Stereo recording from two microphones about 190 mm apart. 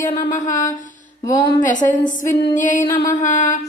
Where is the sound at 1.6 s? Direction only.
40° left (ahead or behind).